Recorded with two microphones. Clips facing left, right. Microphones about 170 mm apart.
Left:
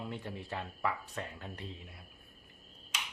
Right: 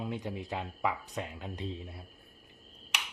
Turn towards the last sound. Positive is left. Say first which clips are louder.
# right 3 dB
turn(degrees=-75)  # may be behind; listen again after turning